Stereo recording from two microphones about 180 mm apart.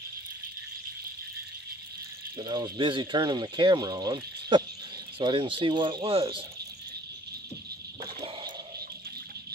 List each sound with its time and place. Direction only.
2.3 s speech: 25° right (ahead or behind)